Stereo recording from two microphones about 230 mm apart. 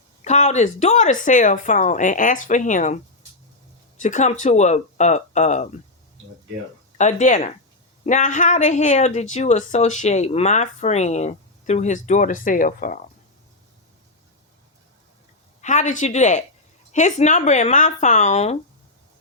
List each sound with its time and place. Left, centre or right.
0.3 s speech: left
4.0 s speech: left
7.0 s speech: left
15.6 s speech: left